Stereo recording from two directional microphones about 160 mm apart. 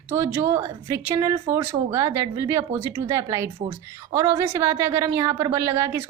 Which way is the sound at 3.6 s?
35° right (ahead or behind).